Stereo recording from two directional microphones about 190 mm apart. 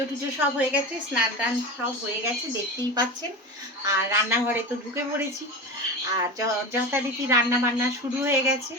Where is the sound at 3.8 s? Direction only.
15° right (ahead or behind).